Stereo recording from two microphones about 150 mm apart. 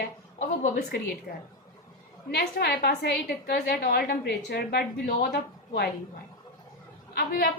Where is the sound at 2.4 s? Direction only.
90° left.